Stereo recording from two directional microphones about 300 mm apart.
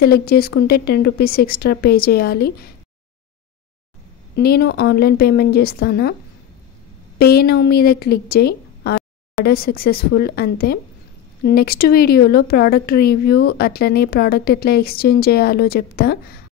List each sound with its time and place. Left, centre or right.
0.0 s speech: left
4.4 s speech: left
7.2 s speech: left